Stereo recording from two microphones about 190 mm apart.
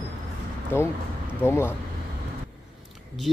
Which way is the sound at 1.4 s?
10° left (ahead or behind).